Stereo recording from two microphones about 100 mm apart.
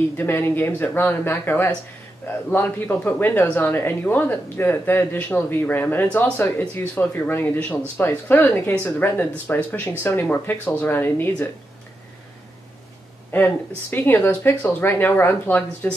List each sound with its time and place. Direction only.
0.2 s speech: 20° left (ahead or behind)
13.3 s speech: 20° left (ahead or behind)